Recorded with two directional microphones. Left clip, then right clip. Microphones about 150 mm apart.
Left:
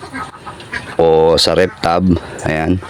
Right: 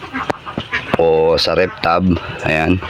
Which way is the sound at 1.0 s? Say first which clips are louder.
Left 3 dB; 40° left (ahead or behind).